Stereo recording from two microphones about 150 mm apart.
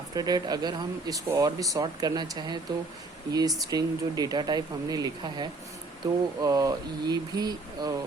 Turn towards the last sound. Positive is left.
turn(degrees=-25)  # may be behind; listen again after turning